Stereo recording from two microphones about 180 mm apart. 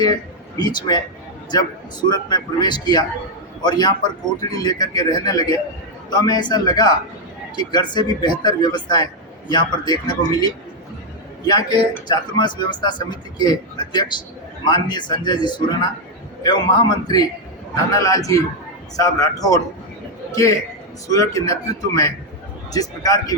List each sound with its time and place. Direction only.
0.0 s a man's voice: 20° left (ahead or behind)
17.9 s a man's voice: 20° left (ahead or behind)